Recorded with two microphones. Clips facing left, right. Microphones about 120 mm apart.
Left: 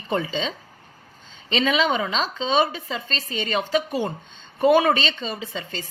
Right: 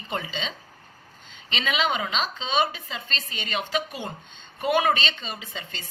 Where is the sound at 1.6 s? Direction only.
35° left (ahead or behind).